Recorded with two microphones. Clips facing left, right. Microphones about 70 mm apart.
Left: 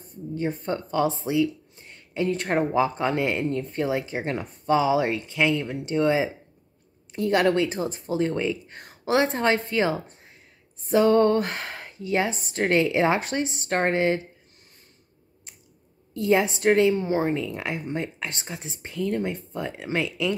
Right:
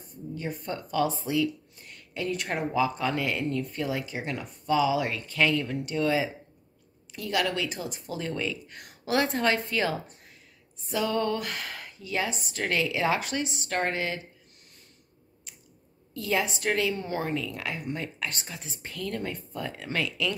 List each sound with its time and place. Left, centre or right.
0.3 s a woman's voice: left
5.2 s a woman's voice: centre
16.1 s a woman's voice: left